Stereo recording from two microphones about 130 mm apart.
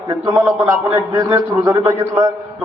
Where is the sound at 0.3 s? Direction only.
20° right (ahead or behind).